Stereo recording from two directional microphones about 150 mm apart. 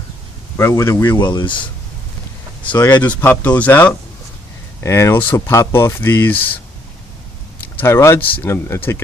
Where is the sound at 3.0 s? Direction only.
10° left (ahead or behind).